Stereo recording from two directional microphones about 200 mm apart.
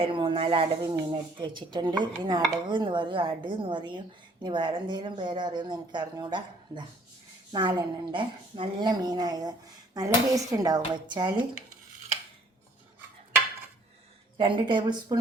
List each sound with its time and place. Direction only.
0.0 s a woman's voice: 25° right (ahead or behind)
14.3 s a woman's voice: 25° right (ahead or behind)